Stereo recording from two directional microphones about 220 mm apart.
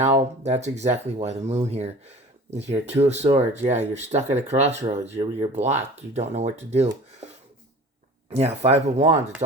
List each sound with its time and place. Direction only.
0.0 s speech: 30° right (ahead or behind)
8.3 s speech: 30° right (ahead or behind)